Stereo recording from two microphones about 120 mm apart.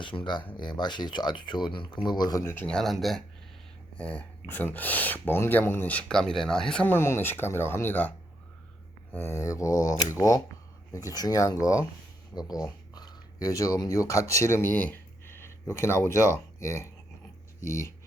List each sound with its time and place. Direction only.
0.0 s speech: 45° left (ahead or behind)
2.4 s speech: 20° left (ahead or behind)
2.6 s speech: 5° left (ahead or behind)
4.0 s speech: 10° left (ahead or behind)
9.1 s speech: 20° left (ahead or behind)